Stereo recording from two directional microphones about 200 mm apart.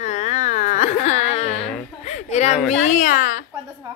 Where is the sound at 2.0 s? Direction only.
35° left (ahead or behind).